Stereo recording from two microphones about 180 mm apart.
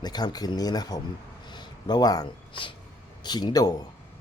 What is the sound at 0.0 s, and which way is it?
Speech, 20° left (ahead or behind).